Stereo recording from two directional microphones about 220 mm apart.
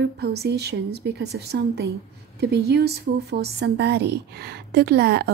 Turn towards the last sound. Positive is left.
turn(degrees=-45)  # may be behind; listen again after turning